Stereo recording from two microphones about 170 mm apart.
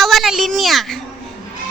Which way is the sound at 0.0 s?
Centre (ahead or behind).